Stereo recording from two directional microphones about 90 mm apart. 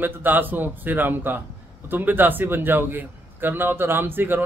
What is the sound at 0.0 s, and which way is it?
A man's voice, 20° right (ahead or behind).